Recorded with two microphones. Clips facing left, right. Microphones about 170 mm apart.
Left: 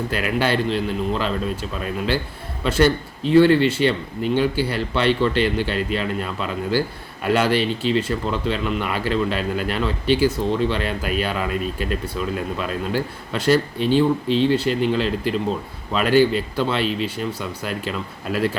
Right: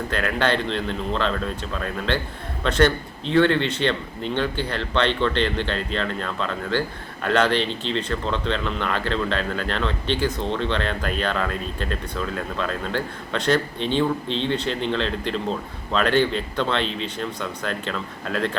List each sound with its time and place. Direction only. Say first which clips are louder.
0.1 s speech: even; 5° left (ahead or behind)